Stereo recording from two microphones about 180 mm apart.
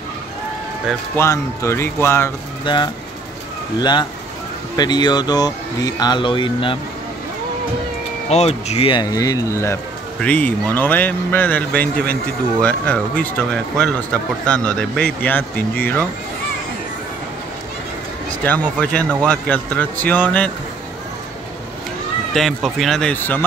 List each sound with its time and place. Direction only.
1.1 s speech: 15° left (ahead or behind)
2.6 s speech: 25° left (ahead or behind)
4.7 s speech: 25° left (ahead or behind)
8.3 s speech: 35° left (ahead or behind); by 16.1 s 10° left (ahead or behind)
18.4 s speech: 10° left (ahead or behind)
22.3 s speech: centre (ahead or behind)